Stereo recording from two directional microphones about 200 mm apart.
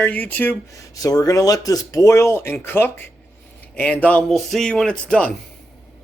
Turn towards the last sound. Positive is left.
turn(degrees=5)  # may be behind; listen again after turning